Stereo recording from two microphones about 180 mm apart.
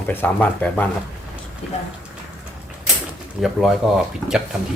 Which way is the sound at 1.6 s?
35° left (ahead or behind).